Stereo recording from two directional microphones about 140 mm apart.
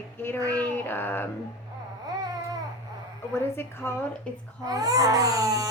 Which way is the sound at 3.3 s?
15° left (ahead or behind).